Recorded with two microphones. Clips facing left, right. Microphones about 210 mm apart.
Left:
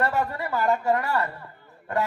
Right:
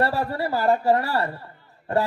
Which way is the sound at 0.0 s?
35° right (ahead or behind).